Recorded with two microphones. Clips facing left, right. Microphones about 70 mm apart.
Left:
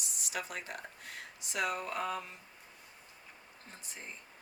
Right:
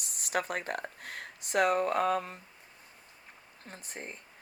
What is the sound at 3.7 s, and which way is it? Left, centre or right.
Speech, right.